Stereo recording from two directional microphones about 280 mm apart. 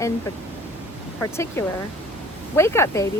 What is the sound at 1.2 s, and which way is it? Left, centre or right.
Speech, centre.